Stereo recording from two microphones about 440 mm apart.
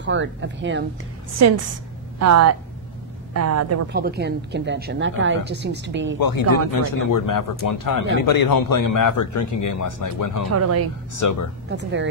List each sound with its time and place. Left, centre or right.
0.0 s a woman's voice: right
1.4 s speech: right
3.9 s a woman's voice: right
6.1 s speech: left
11.7 s a woman's voice: right